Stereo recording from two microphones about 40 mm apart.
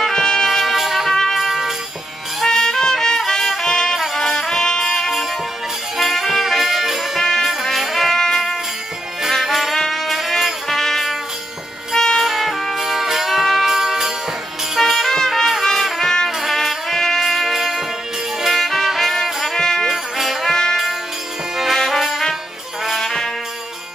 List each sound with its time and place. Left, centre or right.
0.1 s music: centre
0.5 s music: centre
1.1 s music: centre
12.2 s music: centre
14.8 s music: centre
16.3 s music: centre
16.5 s music: centre
19.9 s music: centre
21.7 s jingle bell: centre
22.8 s music: centre